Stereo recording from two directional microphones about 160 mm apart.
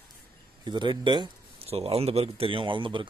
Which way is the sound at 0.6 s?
30° right (ahead or behind).